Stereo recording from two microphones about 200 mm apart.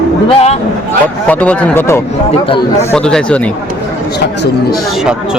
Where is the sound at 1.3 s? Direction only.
10° left (ahead or behind).